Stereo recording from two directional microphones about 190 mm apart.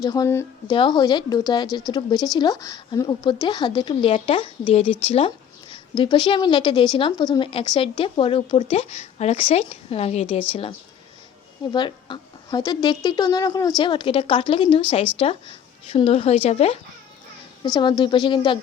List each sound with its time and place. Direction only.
0.0 s a woman's voice: 20° left (ahead or behind)
17.7 s speech: 25° left (ahead or behind)